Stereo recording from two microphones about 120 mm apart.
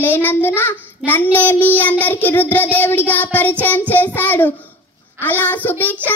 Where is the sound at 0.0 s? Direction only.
15° left (ahead or behind).